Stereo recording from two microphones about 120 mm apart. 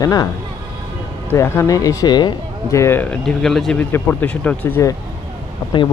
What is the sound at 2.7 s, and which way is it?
Speech, 20° left (ahead or behind).